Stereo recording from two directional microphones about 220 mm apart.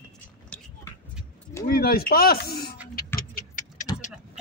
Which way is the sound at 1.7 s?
45° left (ahead or behind).